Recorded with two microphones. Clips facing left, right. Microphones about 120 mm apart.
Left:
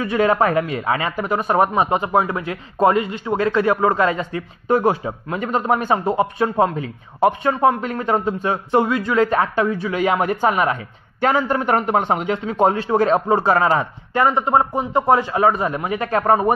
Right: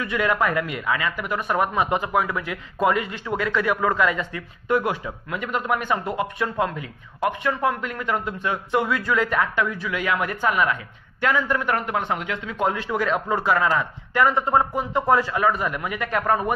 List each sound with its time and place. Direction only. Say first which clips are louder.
0.0 s speech: left 6 dB; 30° left (ahead or behind)
8.0 s a man's voice: left 6 dB; 35° left (ahead or behind)